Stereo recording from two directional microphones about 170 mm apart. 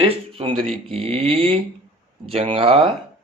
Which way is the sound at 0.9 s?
35° right (ahead or behind).